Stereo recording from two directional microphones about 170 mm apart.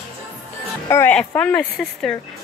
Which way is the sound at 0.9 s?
15° left (ahead or behind).